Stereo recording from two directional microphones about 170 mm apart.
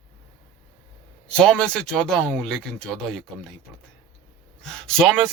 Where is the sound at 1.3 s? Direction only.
5° left (ahead or behind).